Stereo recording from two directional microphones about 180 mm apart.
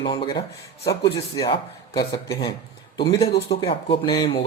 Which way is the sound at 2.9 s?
25° left (ahead or behind).